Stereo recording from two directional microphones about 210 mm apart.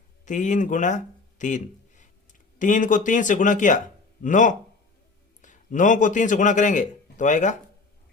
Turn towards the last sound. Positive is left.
turn(degrees=35)  # may be behind; listen again after turning